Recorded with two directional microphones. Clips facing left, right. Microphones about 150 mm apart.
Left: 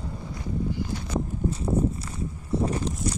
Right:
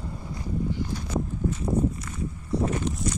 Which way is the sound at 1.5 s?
30° left (ahead or behind).